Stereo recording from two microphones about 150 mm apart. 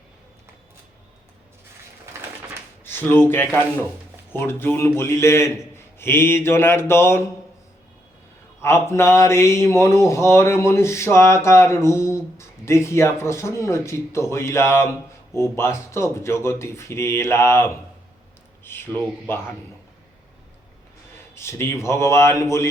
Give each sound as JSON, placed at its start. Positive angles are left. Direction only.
{"t": 2.8, "sound": "speech", "side_deg": 15}
{"t": 8.6, "sound": "speech", "side_deg": 15}
{"t": 21.3, "sound": "speech", "side_deg": 15}